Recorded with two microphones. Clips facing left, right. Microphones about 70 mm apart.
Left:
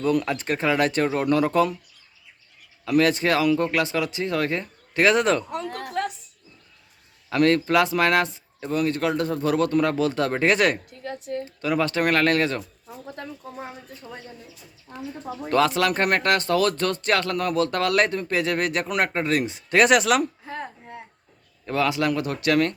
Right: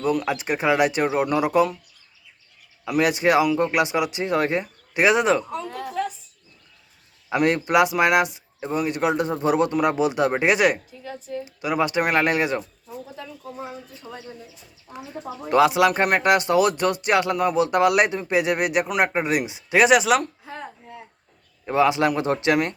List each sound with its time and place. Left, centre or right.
0.0 s speech: centre
2.8 s speech: centre
5.5 s a sound: left
7.3 s speech: centre
11.0 s a woman's voice: left
11.4 s speech: centre
14.9 s speech: centre
21.7 s speech: right